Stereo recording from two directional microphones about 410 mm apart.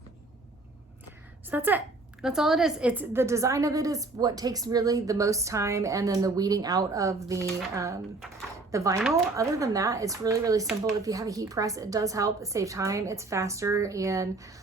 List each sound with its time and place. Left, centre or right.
1.5 s a woman's voice: centre